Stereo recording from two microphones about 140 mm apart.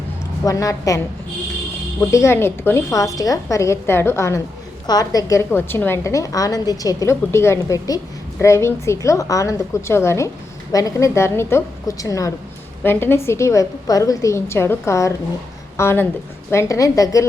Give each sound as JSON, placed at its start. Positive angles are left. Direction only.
{"t": 0.4, "sound": "a woman's voice", "side_deg": 25}